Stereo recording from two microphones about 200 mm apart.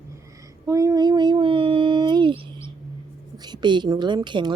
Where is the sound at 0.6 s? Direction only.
15° right (ahead or behind).